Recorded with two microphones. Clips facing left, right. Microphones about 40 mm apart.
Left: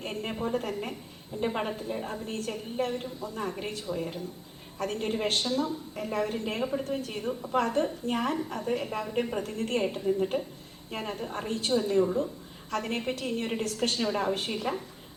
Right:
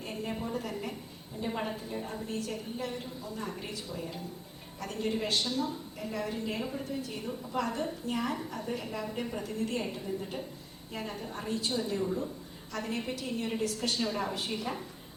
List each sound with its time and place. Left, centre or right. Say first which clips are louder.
0.0 s a sound: left 3 dB; left
0.4 s a woman's voice: left 5 dB; left
2.2 s a woman's voice: left 2 dB; left
6.6 s a woman's voice: left 6 dB; left
6.8 s a woman's voice: left 5 dB; left
14.0 s a woman's voice: left 3 dB; left
14.3 s a woman's voice: left 4 dB; left